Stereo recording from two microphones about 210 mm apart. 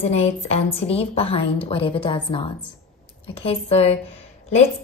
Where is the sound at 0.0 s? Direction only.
30° left (ahead or behind).